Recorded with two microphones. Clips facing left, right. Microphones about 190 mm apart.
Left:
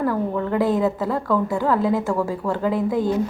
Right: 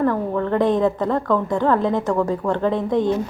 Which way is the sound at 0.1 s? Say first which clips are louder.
Right 1 dB; 10° left (ahead or behind).